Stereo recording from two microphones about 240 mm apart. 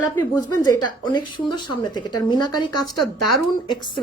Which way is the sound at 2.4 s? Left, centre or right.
Left.